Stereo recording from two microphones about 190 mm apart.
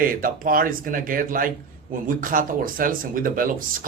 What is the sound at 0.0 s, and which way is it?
Speech, 50° right (ahead or behind).